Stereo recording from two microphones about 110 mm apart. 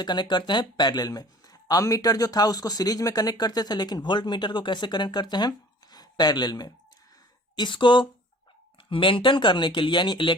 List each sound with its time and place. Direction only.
0.0 s speech: 40° left (ahead or behind)